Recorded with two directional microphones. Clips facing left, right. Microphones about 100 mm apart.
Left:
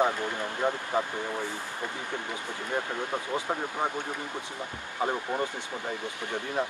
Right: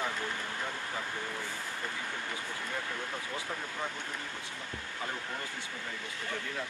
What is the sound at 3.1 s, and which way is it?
Speech, 60° left (ahead or behind).